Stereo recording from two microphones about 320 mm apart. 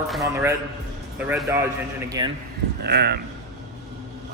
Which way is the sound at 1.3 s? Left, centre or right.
Centre.